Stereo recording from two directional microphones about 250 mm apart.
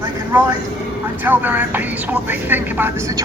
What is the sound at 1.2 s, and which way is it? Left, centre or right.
Speech, centre.